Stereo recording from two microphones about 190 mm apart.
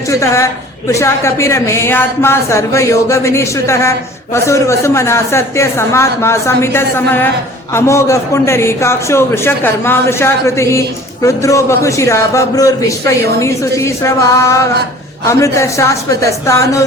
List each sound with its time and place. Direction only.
0.1 s a man's voice: 15° left (ahead or behind)